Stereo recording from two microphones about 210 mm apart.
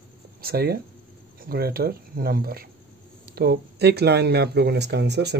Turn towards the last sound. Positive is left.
turn(degrees=-55)  # may be behind; listen again after turning